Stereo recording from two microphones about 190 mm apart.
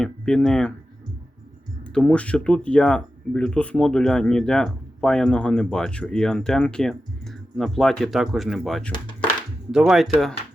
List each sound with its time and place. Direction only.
0.0 s speech: 5° left (ahead or behind)
1.8 s speech: 5° left (ahead or behind)